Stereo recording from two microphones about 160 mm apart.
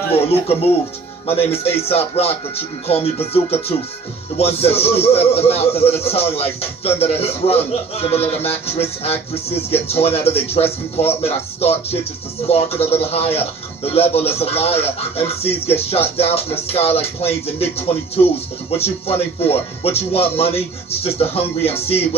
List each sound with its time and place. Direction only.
1.2 s a man's voice: 35° left (ahead or behind)